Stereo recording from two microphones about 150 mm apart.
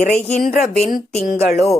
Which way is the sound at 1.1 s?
45° left (ahead or behind).